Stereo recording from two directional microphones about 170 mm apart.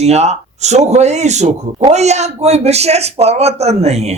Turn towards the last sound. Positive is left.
turn(degrees=-40)  # may be behind; listen again after turning